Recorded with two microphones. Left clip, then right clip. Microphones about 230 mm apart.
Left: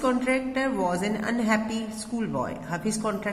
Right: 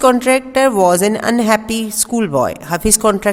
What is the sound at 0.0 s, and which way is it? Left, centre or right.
A woman's voice, right.